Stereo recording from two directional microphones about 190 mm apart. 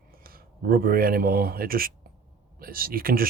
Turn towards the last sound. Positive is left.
turn(degrees=-50)  # may be behind; listen again after turning